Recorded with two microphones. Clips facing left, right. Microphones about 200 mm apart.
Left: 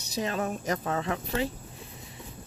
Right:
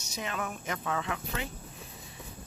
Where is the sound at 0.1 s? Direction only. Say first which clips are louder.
Left 6 dB; 35° left (ahead or behind).